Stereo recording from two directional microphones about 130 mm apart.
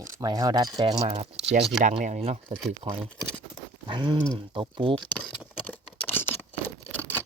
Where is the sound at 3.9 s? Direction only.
35° right (ahead or behind).